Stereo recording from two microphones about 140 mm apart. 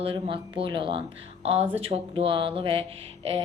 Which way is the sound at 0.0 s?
40° right (ahead or behind).